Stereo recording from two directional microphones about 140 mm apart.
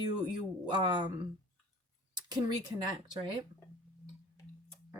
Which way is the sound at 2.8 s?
35° right (ahead or behind).